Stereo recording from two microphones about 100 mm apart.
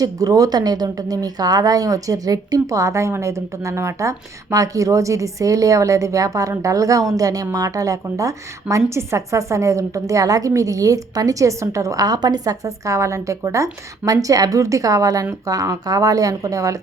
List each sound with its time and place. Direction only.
0.0 s a woman's voice: 35° right (ahead or behind)